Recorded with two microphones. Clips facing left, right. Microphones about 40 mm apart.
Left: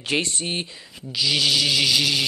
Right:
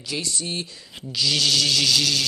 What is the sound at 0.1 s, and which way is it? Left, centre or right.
Speech, left.